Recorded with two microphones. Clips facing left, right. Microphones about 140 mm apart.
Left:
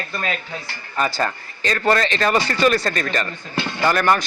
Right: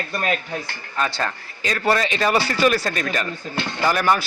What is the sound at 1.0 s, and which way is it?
A man's voice, centre (ahead or behind).